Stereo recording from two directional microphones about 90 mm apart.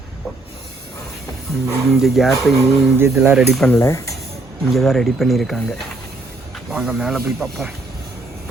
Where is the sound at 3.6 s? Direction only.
30° left (ahead or behind).